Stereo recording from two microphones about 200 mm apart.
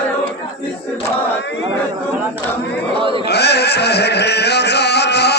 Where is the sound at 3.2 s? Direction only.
55° left (ahead or behind).